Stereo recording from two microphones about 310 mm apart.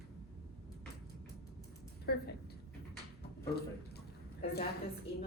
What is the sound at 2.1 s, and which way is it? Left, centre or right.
Speech, left.